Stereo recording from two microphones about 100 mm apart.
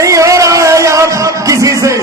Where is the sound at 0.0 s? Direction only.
30° right (ahead or behind).